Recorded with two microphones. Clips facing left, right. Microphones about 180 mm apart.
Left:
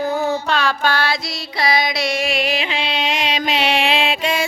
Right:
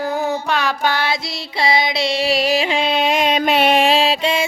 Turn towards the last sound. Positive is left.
turn(degrees=-30)  # may be behind; listen again after turning